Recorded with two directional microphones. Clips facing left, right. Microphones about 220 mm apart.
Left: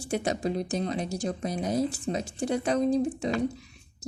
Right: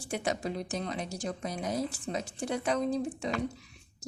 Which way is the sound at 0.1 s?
35° left (ahead or behind).